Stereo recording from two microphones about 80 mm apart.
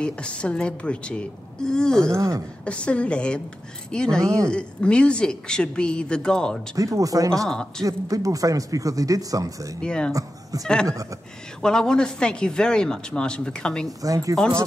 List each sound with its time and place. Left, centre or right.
0.0 s speech: centre
2.1 s speech: right
2.6 s speech: centre
4.2 s speech: right
4.5 s speech: centre
6.7 s speech: right
7.4 s speech: centre
7.8 s speech: right
9.8 s speech: centre
10.9 s speech: right
11.6 s speech: centre
13.8 s speech: right